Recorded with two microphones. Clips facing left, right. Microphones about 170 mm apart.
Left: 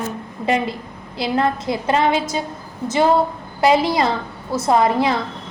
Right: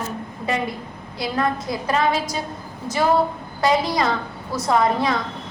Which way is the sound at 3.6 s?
25° left (ahead or behind).